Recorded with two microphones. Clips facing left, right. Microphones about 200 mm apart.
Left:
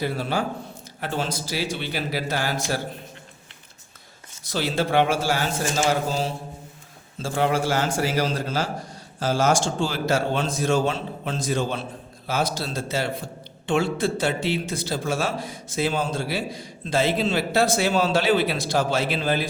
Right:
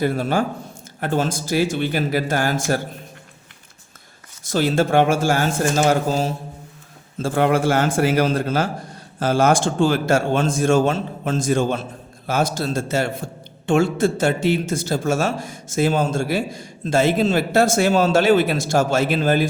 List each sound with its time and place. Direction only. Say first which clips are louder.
0.0 s a man's voice: right 5 dB; 50° right (ahead or behind)
4.4 s a man's voice: right 6 dB; 50° right (ahead or behind)